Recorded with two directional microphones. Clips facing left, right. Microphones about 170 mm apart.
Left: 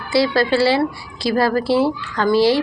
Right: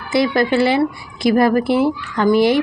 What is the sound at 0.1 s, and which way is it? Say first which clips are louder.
Speech: right 1 dB; 20° right (ahead or behind).